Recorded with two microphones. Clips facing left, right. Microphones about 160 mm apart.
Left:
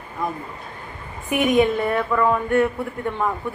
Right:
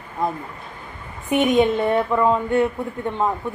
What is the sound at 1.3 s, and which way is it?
A woman's voice, 25° right (ahead or behind).